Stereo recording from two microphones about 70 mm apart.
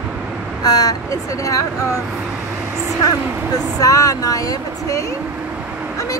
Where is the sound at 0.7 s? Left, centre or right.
Left.